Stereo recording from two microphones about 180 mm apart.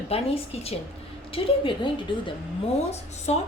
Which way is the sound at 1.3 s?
30° left (ahead or behind).